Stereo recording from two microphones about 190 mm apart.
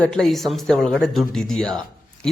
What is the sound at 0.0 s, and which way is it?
Speech, 5° left (ahead or behind).